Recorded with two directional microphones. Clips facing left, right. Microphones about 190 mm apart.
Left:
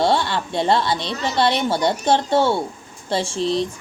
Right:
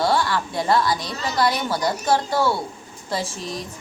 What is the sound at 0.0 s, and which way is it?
A woman's voice, 25° left (ahead or behind).